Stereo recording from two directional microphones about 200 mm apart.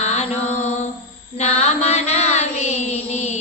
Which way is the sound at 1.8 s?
35° left (ahead or behind).